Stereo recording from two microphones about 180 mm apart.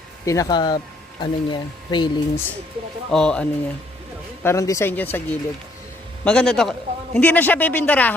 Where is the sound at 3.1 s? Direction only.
5° left (ahead or behind).